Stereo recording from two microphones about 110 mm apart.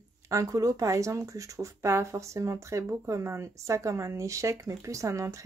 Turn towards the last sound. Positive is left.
turn(degrees=-30)  # may be behind; listen again after turning